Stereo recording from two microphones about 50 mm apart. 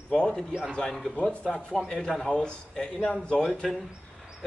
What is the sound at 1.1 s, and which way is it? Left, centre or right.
Speech, left.